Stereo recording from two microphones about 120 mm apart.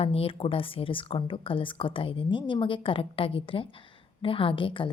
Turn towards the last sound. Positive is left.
turn(degrees=45)  # may be behind; listen again after turning